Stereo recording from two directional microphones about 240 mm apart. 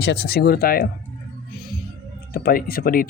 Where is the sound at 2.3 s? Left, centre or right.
Left.